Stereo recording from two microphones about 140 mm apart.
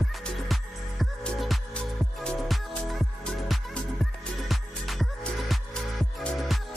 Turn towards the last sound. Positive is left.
turn(degrees=0)  # may be behind; listen again after turning